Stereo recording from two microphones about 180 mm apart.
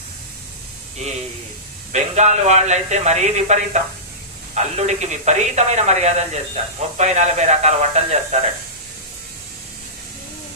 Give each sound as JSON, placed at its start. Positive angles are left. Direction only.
{"t": 1.9, "sound": "speech", "side_deg": -40}